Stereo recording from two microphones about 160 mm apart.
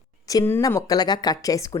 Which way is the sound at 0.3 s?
20° left (ahead or behind).